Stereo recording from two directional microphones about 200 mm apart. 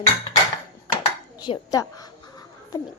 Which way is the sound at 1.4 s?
20° left (ahead or behind).